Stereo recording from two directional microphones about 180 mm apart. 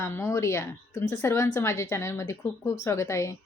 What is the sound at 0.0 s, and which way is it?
A woman's voice, 15° left (ahead or behind).